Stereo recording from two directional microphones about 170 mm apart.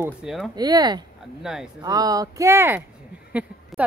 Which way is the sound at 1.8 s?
20° right (ahead or behind).